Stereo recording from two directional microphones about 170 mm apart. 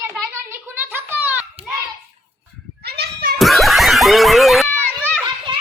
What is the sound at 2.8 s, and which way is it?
Children playing, 70° right (ahead or behind).